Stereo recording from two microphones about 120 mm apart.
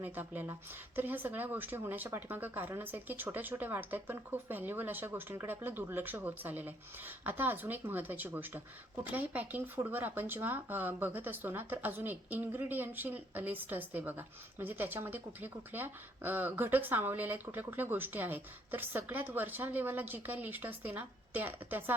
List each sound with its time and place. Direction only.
0.0 s speech: 15° right (ahead or behind)